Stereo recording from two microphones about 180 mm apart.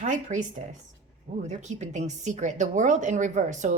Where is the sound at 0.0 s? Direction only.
45° right (ahead or behind).